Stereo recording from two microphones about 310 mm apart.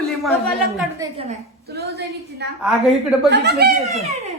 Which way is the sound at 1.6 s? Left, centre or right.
Right.